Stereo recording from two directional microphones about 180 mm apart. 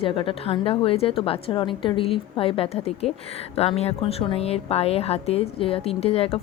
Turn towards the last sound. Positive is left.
turn(degrees=35)  # may be behind; listen again after turning